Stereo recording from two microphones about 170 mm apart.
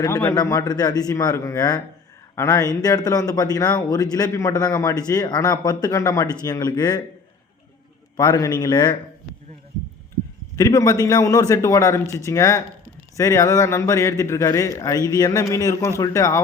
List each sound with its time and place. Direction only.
0.3 s speech: 20° left (ahead or behind)
8.1 s speech: 25° left (ahead or behind)
10.6 s speech: 20° left (ahead or behind)